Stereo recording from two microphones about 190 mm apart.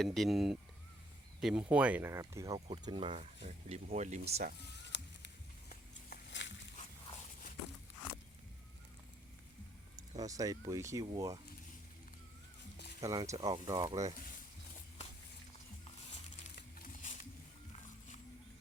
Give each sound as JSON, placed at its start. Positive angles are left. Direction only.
{"t": 0.0, "sound": "speech", "side_deg": 0}
{"t": 2.6, "sound": "speech", "side_deg": -25}
{"t": 4.6, "sound": "sizzle", "side_deg": 65}
{"t": 6.4, "sound": "a sound", "side_deg": 70}
{"t": 6.7, "sound": "walk", "side_deg": 40}
{"t": 9.9, "sound": "speech", "side_deg": -20}
{"t": 13.0, "sound": "speech", "side_deg": -20}
{"t": 16.6, "sound": "music", "side_deg": 45}